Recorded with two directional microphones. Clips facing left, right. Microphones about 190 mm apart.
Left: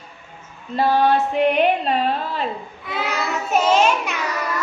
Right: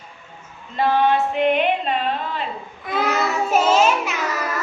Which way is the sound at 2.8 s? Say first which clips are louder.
Right 5 dB; 45° right (ahead or behind).